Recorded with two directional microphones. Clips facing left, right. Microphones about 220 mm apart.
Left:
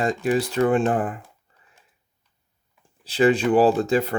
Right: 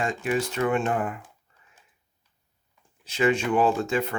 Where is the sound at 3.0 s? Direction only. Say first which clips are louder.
Left 5 dB; 35° left (ahead or behind).